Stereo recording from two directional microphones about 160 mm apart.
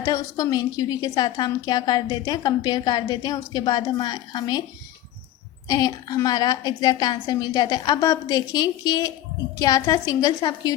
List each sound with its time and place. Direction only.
0.0 s a woman's voice: 20° left (ahead or behind)
5.6 s a woman's voice: 25° left (ahead or behind)